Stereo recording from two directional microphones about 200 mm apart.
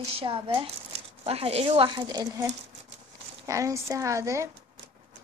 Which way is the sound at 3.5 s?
15° right (ahead or behind).